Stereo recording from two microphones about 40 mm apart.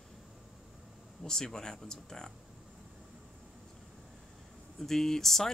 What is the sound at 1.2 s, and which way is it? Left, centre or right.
Speech, centre.